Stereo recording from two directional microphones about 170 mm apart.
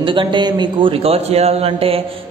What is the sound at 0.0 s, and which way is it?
A man's voice, 30° right (ahead or behind).